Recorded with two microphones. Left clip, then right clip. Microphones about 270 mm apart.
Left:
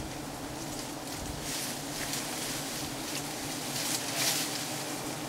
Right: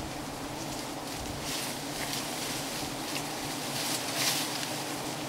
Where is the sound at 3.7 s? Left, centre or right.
Centre.